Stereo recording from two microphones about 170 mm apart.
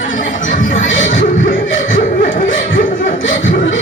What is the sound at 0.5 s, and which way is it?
Music, 50° left (ahead or behind).